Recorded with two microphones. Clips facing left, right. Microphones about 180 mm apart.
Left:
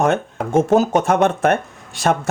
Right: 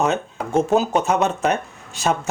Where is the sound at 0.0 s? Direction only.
50° left (ahead or behind).